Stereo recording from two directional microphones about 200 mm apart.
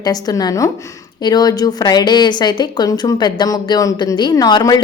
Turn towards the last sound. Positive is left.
turn(degrees=20)  # may be behind; listen again after turning